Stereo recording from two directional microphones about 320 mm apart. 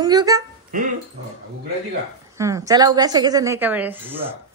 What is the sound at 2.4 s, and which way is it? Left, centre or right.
Speech, centre.